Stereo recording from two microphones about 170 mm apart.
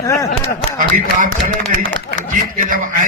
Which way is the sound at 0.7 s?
50° right (ahead or behind).